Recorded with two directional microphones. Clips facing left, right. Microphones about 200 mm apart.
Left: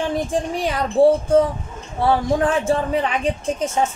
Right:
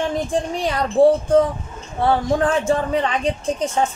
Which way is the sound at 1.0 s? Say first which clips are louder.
Even; 5° left (ahead or behind).